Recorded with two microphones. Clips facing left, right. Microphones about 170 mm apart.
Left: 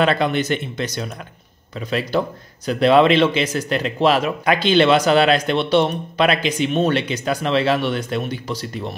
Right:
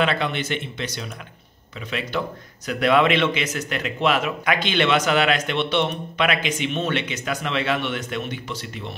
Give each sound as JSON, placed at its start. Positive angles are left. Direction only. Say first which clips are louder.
{"t": 0.0, "sound": "a man's voice", "louder": "left 5 dB", "side_deg": 40}